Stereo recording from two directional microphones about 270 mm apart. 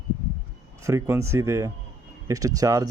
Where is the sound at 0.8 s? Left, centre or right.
Centre.